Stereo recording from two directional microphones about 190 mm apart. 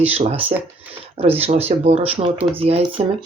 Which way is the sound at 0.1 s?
35° right (ahead or behind).